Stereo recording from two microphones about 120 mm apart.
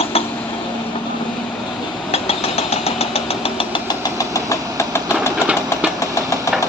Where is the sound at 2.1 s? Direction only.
60° left (ahead or behind).